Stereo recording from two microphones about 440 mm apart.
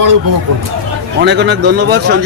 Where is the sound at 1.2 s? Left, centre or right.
Right.